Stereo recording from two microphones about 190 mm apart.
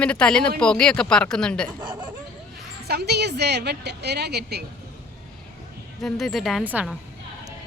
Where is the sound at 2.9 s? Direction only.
60° right (ahead or behind).